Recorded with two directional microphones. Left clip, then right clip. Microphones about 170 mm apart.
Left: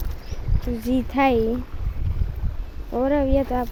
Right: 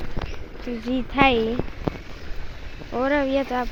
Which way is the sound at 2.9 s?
30° left (ahead or behind).